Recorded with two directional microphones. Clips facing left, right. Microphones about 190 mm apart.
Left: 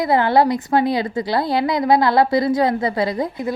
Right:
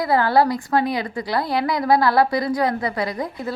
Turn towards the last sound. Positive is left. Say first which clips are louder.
# left 4 dB
turn(degrees=20)  # may be behind; listen again after turning